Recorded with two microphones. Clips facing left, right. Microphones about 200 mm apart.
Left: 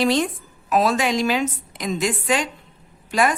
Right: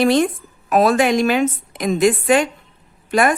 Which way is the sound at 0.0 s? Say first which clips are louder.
Right 5 dB; 55° right (ahead or behind).